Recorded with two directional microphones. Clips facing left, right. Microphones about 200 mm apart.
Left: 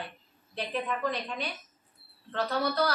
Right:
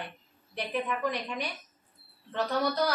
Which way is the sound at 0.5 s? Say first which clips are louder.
Right 1 dB; 15° right (ahead or behind).